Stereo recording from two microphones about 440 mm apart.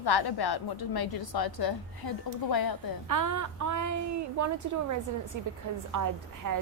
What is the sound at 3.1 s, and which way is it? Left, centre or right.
A woman's voice, right.